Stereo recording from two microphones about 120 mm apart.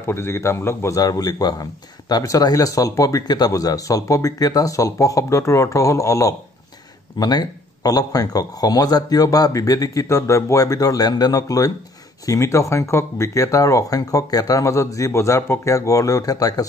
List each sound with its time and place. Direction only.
0.0 s a man's voice: 20° left (ahead or behind)